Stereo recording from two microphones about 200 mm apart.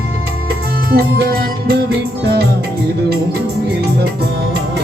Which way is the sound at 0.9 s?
55° right (ahead or behind).